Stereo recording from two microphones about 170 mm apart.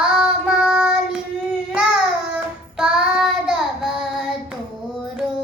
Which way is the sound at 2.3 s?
5° right (ahead or behind).